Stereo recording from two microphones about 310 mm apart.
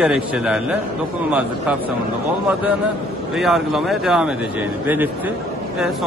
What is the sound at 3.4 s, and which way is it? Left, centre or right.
Speech, centre.